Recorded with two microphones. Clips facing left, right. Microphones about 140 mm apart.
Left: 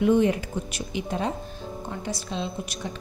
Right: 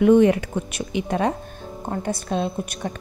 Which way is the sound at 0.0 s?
65° right (ahead or behind).